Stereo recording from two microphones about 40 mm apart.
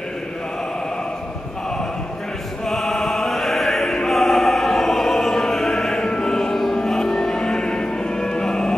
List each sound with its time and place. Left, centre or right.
2.6 s opera: centre
6.8 s music: centre